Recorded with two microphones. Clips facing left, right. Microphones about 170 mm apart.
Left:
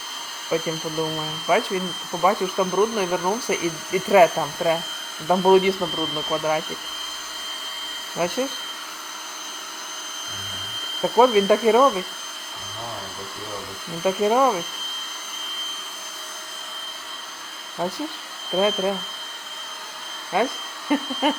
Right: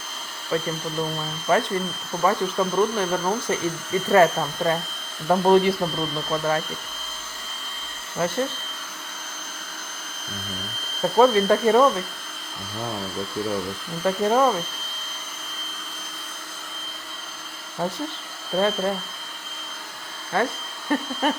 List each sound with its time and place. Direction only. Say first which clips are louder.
0.5 s speech: left 2 dB; 10° left (ahead or behind)
8.1 s speech: left 1 dB; 10° left (ahead or behind)
11.0 s speech: left 1 dB; 10° left (ahead or behind)
14.0 s speech: left 1 dB; 10° left (ahead or behind)
18.6 s speech: left 1 dB; 10° left (ahead or behind)
20.3 s speech: left 1 dB; 15° left (ahead or behind)